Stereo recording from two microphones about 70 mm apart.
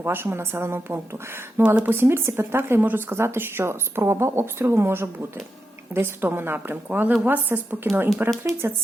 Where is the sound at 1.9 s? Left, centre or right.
Right.